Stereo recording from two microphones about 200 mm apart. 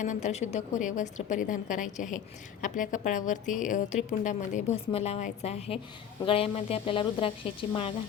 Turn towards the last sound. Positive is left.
turn(degrees=25)  # may be behind; listen again after turning